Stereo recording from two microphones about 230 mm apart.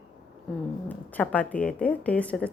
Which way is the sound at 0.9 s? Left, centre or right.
Centre.